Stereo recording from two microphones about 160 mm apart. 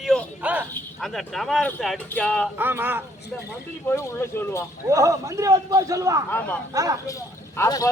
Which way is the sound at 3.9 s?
20° left (ahead or behind).